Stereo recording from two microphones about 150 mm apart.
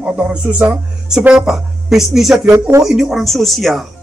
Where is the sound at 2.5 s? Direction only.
20° right (ahead or behind).